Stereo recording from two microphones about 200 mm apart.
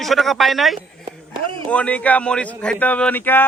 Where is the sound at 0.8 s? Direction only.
25° right (ahead or behind).